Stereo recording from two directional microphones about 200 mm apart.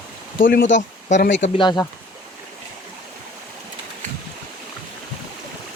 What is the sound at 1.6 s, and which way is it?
Speech, 20° left (ahead or behind).